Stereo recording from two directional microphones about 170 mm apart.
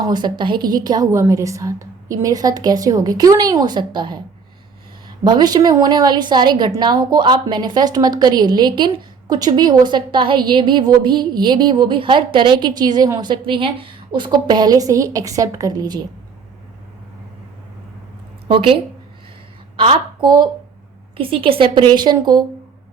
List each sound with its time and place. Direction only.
0.0 s a woman's voice: 25° right (ahead or behind)
18.4 s a woman's voice: 30° right (ahead or behind)